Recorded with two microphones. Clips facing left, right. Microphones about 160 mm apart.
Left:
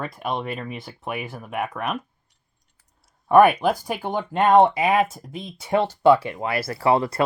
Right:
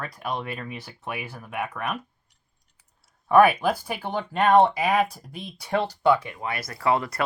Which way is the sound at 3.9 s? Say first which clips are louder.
Left 3 dB; 15° left (ahead or behind).